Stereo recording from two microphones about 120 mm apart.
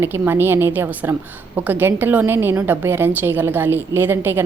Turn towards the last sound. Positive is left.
turn(degrees=-20)  # may be behind; listen again after turning